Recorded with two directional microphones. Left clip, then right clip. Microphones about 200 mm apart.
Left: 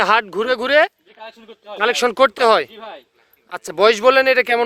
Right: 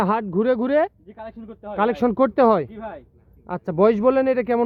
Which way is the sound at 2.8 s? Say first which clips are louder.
Even; 25° left (ahead or behind).